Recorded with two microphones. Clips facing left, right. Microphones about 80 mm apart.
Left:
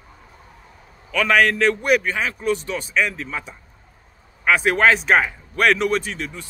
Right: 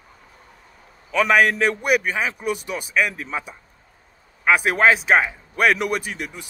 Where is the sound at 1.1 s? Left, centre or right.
Centre.